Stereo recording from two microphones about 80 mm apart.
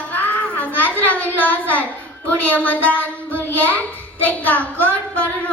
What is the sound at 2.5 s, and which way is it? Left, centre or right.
A child's voice, left.